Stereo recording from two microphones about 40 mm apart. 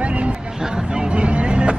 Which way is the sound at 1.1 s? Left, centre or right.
Right.